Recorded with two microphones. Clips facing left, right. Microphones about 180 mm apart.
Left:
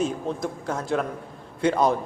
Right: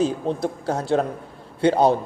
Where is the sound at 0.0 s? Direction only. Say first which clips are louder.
Right 4 dB; 35° right (ahead or behind).